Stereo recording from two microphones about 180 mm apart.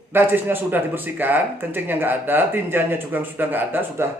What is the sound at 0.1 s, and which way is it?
Speech, 10° right (ahead or behind).